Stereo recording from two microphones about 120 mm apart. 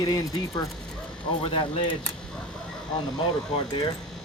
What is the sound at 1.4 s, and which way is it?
Speech, 50° left (ahead or behind).